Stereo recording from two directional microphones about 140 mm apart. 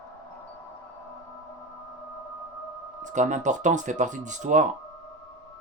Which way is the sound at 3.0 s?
60° right (ahead or behind).